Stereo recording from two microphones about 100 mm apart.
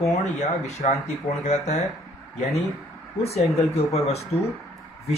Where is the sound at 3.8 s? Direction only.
90° left.